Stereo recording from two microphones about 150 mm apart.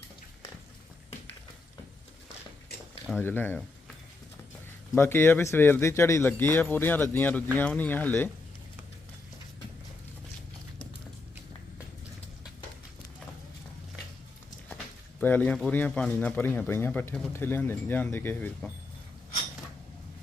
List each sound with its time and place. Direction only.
3.2 s speech: 15° left (ahead or behind)
4.9 s speech: 15° left (ahead or behind)
15.2 s speech: 10° left (ahead or behind)